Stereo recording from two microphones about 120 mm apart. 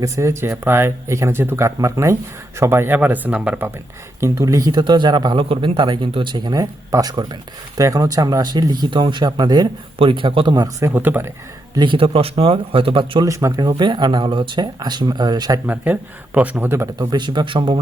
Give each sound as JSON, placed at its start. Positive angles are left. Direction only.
{"t": 0.0, "sound": "speech", "side_deg": -25}
{"t": 4.2, "sound": "speech", "side_deg": -25}
{"t": 10.8, "sound": "speech", "side_deg": -15}
{"t": 11.7, "sound": "speech", "side_deg": -40}
{"t": 13.2, "sound": "speech", "side_deg": -25}
{"t": 15.6, "sound": "speech", "side_deg": -15}
{"t": 17.0, "sound": "speech", "side_deg": -35}